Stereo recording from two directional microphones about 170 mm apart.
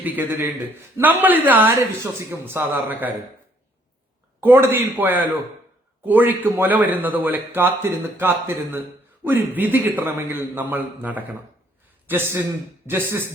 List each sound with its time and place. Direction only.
0.0 s speech: 10° right (ahead or behind)
4.4 s speech: 10° right (ahead or behind)